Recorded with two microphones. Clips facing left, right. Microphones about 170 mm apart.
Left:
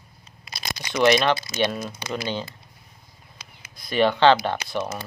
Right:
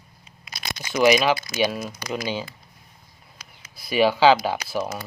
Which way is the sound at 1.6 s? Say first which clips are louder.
Right 1 dB; 5° right (ahead or behind).